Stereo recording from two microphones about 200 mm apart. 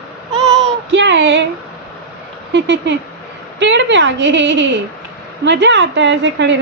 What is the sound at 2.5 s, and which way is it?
A woman's voice, 60° right (ahead or behind).